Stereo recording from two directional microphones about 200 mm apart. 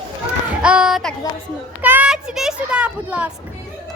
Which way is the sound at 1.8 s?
10° right (ahead or behind).